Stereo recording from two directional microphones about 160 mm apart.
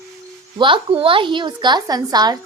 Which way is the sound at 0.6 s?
30° right (ahead or behind).